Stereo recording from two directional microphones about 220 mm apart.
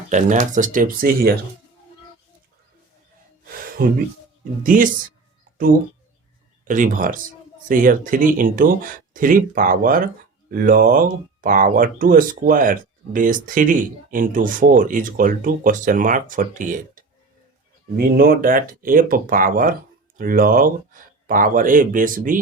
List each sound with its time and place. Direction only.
0.1 s speech: 35° right (ahead or behind)
3.8 s speech: 40° right (ahead or behind)
6.7 s speech: 35° right (ahead or behind)